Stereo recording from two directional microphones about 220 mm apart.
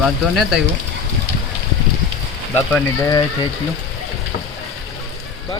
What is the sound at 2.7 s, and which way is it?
Speech, 15° left (ahead or behind).